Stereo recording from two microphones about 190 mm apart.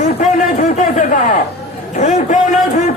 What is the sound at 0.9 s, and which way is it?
A man's voice, 40° left (ahead or behind).